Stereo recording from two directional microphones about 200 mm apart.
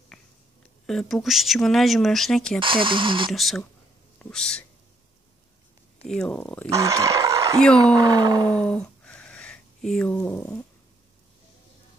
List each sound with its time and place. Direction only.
0.1 s a sound: centre (ahead or behind)
0.8 s speech: centre (ahead or behind)
2.6 s speech: 25° right (ahead or behind)
3.3 s speech: centre (ahead or behind)
6.0 s speech: 5° left (ahead or behind)
6.7 s speech: 15° right (ahead or behind)
8.5 s a sound: 5° left (ahead or behind)
10.1 s speech: 10° left (ahead or behind)